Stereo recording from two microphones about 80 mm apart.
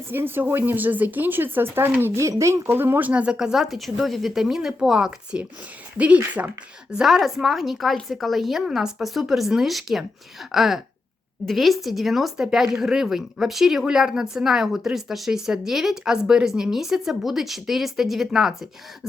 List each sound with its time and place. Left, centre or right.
0.1 s speech: right
2.2 s speech: right
2.7 s speech: right
6.9 s speech: centre